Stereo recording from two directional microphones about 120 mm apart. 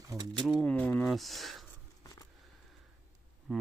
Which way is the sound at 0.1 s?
35° right (ahead or behind).